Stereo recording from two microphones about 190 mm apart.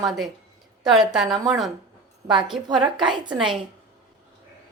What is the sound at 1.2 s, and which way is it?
Speech, 20° right (ahead or behind).